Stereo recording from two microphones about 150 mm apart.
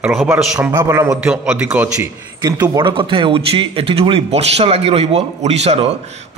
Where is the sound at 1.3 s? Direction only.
5° right (ahead or behind).